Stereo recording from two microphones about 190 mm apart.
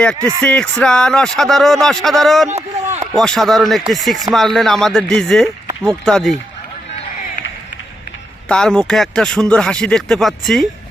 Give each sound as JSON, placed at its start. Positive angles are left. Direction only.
{"t": 0.2, "sound": "speech", "side_deg": -15}
{"t": 0.4, "sound": "speech", "side_deg": 5}
{"t": 2.5, "sound": "speech", "side_deg": -35}
{"t": 3.2, "sound": "speech", "side_deg": 0}
{"t": 8.4, "sound": "speech", "side_deg": 5}